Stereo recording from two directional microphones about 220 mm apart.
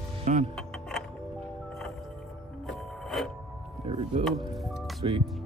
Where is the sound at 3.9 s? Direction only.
25° right (ahead or behind).